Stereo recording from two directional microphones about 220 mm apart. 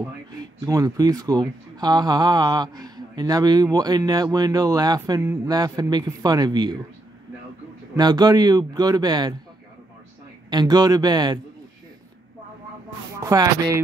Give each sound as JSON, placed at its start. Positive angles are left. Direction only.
{"t": 0.0, "sound": "speech", "side_deg": -15}
{"t": 7.9, "sound": "speech", "side_deg": -20}
{"t": 10.5, "sound": "a man's voice", "side_deg": -20}
{"t": 13.2, "sound": "speech", "side_deg": -15}